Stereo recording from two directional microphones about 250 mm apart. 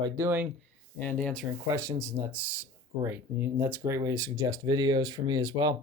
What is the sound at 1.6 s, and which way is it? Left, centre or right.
Speech, centre.